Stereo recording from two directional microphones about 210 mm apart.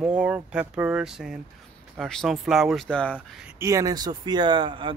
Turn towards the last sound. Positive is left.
turn(degrees=-25)  # may be behind; listen again after turning